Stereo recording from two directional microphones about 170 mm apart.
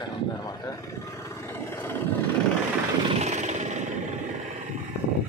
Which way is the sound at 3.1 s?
45° right (ahead or behind).